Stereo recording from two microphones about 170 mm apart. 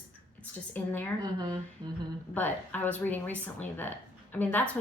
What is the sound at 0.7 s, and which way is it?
Speech, 10° left (ahead or behind).